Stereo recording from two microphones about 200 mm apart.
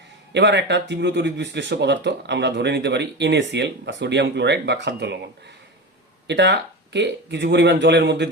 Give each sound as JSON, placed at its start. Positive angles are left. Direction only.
{"t": 0.3, "sound": "speech", "side_deg": -60}